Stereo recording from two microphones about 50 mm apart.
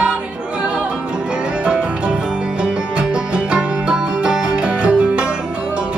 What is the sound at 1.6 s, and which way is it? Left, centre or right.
Music, centre.